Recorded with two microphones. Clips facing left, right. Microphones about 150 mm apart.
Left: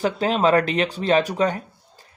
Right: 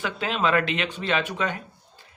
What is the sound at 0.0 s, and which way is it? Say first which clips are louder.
Speech: left 6 dB; 40° left (ahead or behind).